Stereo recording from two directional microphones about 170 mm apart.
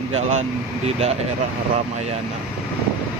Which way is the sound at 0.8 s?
40° right (ahead or behind).